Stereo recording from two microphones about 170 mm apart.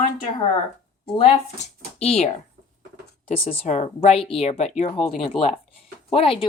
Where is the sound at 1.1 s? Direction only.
35° left (ahead or behind).